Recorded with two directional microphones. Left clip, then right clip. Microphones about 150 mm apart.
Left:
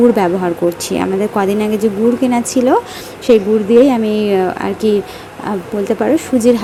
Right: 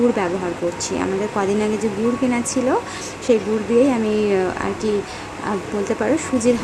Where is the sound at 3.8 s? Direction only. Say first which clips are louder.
Left 5 dB; 30° left (ahead or behind).